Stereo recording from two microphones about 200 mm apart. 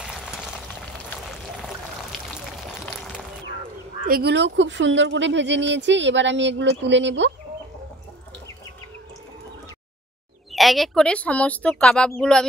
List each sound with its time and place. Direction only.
0.0 s a sound: 5° right (ahead or behind)
4.1 s speech: 55° right (ahead or behind)
10.5 s speech: centre (ahead or behind)